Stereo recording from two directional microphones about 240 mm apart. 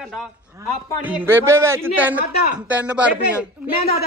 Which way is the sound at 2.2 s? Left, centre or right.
Left.